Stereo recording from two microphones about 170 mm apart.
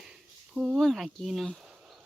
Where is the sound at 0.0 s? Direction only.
5° right (ahead or behind).